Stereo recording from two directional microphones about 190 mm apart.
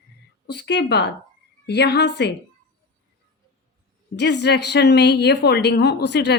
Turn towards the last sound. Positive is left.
turn(degrees=65)  # may be behind; listen again after turning